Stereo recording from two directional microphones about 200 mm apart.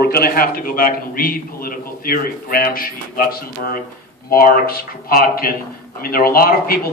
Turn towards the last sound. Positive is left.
turn(degrees=50)  # may be behind; listen again after turning